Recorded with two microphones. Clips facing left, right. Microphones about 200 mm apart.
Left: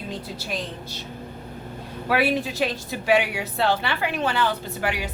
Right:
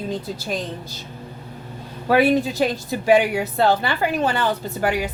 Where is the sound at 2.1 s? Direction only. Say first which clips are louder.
Right 6 dB; 40° right (ahead or behind).